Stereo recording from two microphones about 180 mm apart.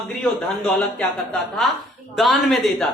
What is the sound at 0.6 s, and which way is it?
A man's voice, 5° left (ahead or behind).